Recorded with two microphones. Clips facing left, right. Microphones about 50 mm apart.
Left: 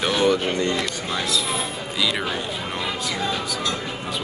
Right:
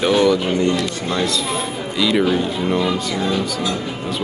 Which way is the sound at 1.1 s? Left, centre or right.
Centre.